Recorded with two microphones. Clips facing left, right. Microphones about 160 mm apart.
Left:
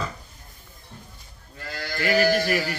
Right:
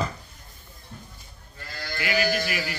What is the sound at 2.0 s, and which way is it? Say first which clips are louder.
Speech: left 5 dB; 40° left (ahead or behind).